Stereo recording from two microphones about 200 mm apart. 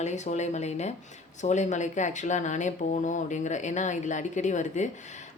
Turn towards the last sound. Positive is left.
turn(degrees=35)  # may be behind; listen again after turning